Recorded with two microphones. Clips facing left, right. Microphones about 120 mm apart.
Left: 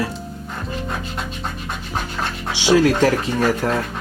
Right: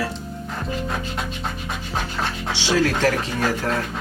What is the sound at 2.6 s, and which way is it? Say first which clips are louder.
Speech: left 5 dB; 15° left (ahead or behind).